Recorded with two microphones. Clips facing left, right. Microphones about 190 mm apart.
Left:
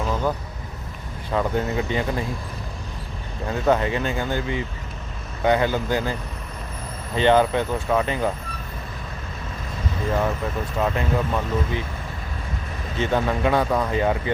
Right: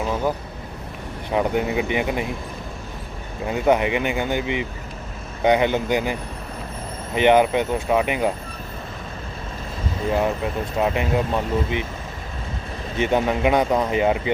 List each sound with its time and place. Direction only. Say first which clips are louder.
0.0 s vehicle: right 1 dB; 10° right (ahead or behind)
1.3 s speech: right 2 dB; 15° right (ahead or behind)
3.4 s speech: right 2 dB; 15° right (ahead or behind)
10.1 s speech: right 2 dB; 15° right (ahead or behind)
13.0 s speech: right 2 dB; 20° right (ahead or behind)